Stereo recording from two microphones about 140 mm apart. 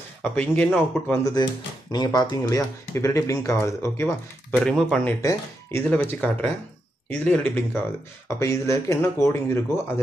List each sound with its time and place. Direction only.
0.2 s speech: 5° left (ahead or behind)
1.2 s speech: 30° left (ahead or behind)
4.6 s speech: 5° left (ahead or behind)
5.2 s speech: 15° left (ahead or behind)